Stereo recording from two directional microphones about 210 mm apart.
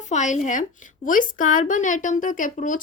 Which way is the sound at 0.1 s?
35° left (ahead or behind).